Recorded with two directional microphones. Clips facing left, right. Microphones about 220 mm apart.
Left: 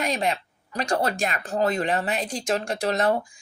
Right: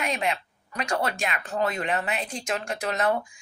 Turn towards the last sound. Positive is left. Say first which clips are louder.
# left 3 dB
turn(degrees=35)  # may be behind; listen again after turning